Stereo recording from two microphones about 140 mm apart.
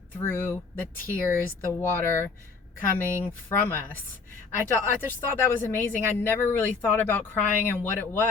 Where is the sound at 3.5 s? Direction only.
15° left (ahead or behind).